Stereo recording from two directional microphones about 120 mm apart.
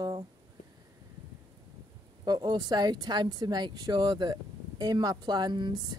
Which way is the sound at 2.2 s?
35° right (ahead or behind).